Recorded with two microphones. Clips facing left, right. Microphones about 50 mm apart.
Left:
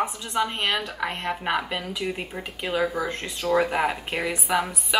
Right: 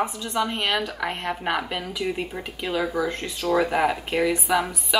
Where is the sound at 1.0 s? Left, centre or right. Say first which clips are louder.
Right 1 dB; centre.